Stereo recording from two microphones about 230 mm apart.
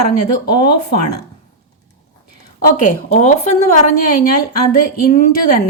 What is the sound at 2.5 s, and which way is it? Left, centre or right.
A woman's voice, left.